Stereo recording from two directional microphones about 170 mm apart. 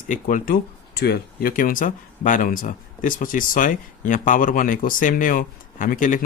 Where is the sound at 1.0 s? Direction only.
65° left (ahead or behind).